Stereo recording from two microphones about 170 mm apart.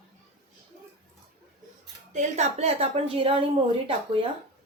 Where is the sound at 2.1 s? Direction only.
40° right (ahead or behind).